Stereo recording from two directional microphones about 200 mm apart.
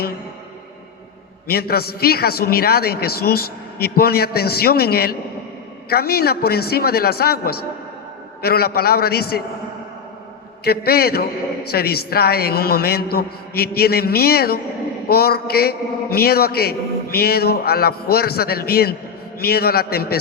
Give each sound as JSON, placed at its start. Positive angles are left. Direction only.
{"t": 1.5, "sound": "a man's voice", "side_deg": 50}
{"t": 10.6, "sound": "a man's voice", "side_deg": 50}